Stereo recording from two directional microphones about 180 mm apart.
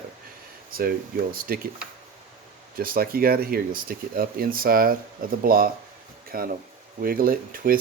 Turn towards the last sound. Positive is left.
turn(degrees=-55)  # may be behind; listen again after turning